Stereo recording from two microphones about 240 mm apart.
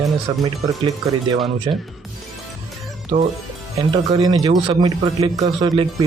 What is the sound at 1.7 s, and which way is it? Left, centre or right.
Speech, right.